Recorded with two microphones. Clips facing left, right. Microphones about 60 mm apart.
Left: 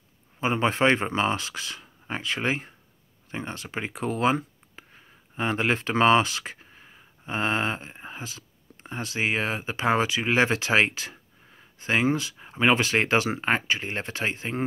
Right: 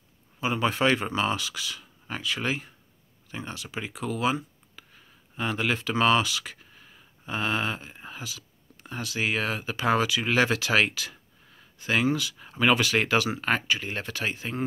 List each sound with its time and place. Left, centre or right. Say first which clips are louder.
0.4 s speech: left 2 dB; left